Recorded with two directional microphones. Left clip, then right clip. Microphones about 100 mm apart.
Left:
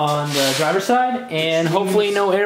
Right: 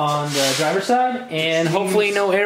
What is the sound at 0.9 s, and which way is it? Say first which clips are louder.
Speech: left 1 dB; 55° left (ahead or behind).